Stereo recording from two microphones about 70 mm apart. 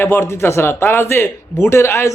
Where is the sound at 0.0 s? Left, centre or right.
Left.